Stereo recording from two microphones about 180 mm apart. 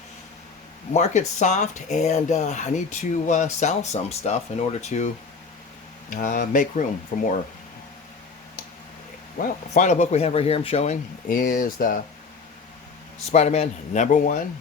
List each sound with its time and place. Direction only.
0.9 s speech: 40° left (ahead or behind)
6.1 s speech: 50° left (ahead or behind)
9.4 s speech: 45° left (ahead or behind)
11.3 s speech: 50° left (ahead or behind)
13.3 s speech: 40° left (ahead or behind)